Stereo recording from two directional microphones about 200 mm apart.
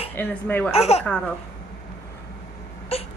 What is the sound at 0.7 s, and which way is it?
Speech, 30° left (ahead or behind).